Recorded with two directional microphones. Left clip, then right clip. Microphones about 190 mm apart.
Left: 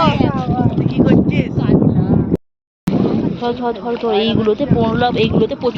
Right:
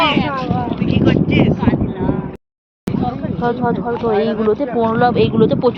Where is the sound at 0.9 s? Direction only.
50° left (ahead or behind).